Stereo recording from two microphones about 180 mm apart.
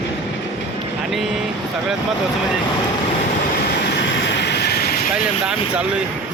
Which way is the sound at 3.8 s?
75° left (ahead or behind).